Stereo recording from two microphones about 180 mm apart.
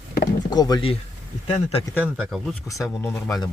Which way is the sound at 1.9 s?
10° right (ahead or behind).